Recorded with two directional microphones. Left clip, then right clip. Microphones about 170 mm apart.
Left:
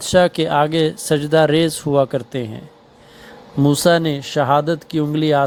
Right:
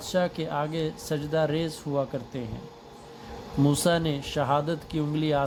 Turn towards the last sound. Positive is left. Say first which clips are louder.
# left 10 dB
turn(degrees=40)  # may be behind; listen again after turning